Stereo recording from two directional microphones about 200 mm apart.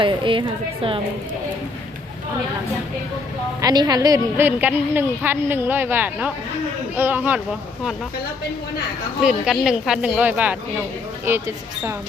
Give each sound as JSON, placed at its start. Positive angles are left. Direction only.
{"t": 0.0, "sound": "a woman's voice", "side_deg": -25}
{"t": 3.6, "sound": "a woman's voice", "side_deg": -20}
{"t": 9.2, "sound": "a woman's voice", "side_deg": -5}